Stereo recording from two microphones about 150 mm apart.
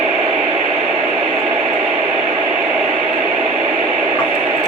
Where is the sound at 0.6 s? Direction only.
40° right (ahead or behind).